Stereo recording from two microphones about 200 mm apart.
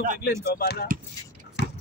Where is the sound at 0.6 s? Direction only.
50° left (ahead or behind).